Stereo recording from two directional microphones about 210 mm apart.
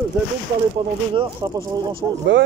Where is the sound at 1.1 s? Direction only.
20° right (ahead or behind).